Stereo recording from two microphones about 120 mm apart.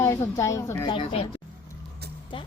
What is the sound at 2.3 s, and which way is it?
Music, 45° left (ahead or behind).